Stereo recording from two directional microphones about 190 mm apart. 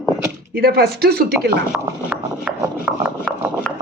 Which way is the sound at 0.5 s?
55° right (ahead or behind).